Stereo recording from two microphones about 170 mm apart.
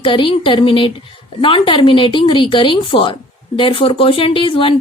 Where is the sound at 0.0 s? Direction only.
30° left (ahead or behind).